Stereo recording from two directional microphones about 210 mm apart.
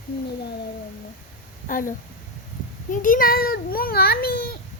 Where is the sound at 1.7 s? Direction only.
40° left (ahead or behind).